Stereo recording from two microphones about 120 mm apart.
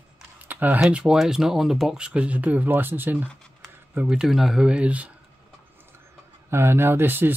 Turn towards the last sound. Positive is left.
turn(degrees=-20)  # may be behind; listen again after turning